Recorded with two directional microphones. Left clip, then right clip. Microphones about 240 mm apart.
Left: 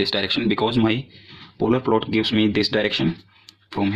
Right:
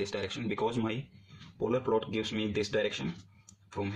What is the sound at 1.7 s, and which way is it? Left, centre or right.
Speech, left.